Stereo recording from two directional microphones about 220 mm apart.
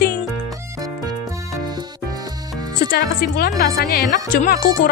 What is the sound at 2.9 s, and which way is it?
Speech, 40° left (ahead or behind).